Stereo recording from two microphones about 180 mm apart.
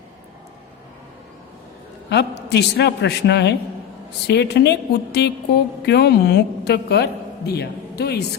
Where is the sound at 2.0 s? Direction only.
70° left (ahead or behind).